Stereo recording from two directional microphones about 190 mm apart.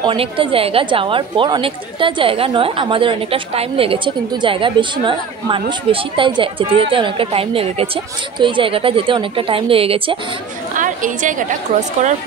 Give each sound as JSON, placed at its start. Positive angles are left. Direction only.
{"t": 0.0, "sound": "a woman's voice", "side_deg": -25}
{"t": 10.7, "sound": "chatter", "side_deg": -45}